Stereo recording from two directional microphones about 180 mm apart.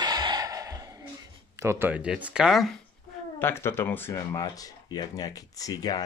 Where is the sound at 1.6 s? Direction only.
15° right (ahead or behind).